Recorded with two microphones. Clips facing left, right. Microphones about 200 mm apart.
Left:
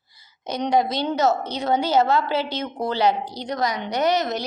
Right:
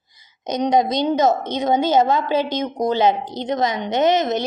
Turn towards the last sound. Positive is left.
turn(degrees=-20)  # may be behind; listen again after turning